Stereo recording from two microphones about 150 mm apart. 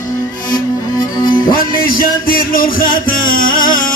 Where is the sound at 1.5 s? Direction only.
70° left (ahead or behind).